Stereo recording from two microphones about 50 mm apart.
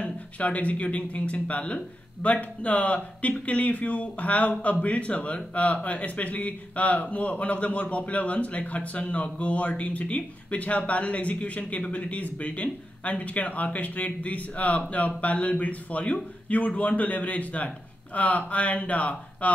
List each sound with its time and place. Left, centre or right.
0.0 s speech: left